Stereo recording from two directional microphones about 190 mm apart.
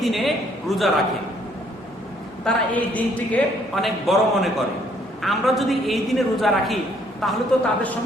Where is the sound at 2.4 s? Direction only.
10° left (ahead or behind).